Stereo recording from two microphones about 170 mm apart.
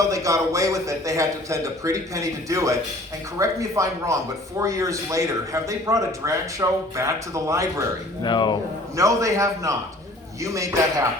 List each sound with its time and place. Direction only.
0.0 s speech: 20° right (ahead or behind)
8.2 s speech: 25° left (ahead or behind)
9.0 s speech: 20° right (ahead or behind)